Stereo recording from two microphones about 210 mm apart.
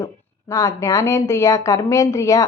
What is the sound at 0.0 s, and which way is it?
A woman's voice, 15° left (ahead or behind).